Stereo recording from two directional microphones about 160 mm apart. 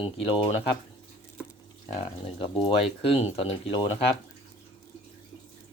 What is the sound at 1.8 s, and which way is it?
Speech, 35° left (ahead or behind).